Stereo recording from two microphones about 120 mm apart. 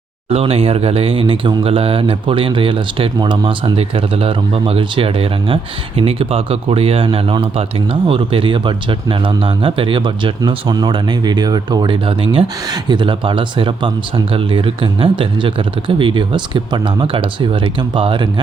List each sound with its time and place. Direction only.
0.3 s speech: 55° right (ahead or behind)